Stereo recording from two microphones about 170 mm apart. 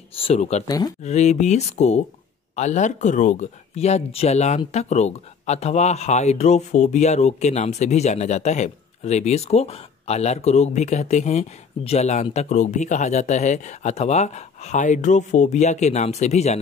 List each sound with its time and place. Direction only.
0.1 s speech: 35° left (ahead or behind)
0.7 s speech: 20° left (ahead or behind)
1.0 s speech: 40° left (ahead or behind)